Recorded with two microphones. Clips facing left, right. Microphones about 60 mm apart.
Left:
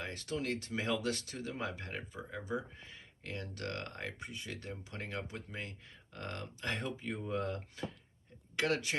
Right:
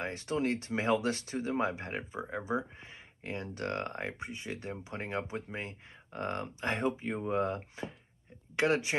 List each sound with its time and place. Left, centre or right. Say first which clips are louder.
0.0 s speech: right 6 dB; right